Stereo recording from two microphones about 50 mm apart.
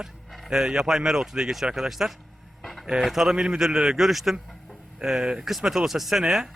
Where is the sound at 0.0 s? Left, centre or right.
Centre.